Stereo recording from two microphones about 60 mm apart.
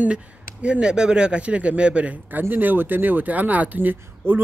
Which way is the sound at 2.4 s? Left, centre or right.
Right.